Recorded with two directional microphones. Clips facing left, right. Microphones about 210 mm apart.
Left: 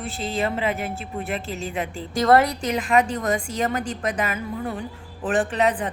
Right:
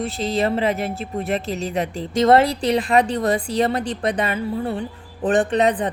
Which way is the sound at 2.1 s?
25° right (ahead or behind).